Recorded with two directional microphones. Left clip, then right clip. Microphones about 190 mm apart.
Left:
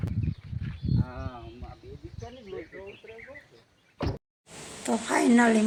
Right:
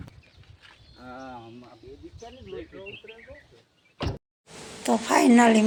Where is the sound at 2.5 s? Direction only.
5° right (ahead or behind).